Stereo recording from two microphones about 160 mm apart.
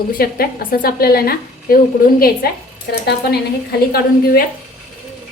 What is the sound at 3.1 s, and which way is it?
A woman's voice, 80° left.